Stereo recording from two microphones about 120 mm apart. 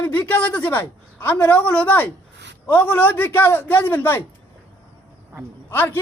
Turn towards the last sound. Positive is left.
turn(degrees=15)  # may be behind; listen again after turning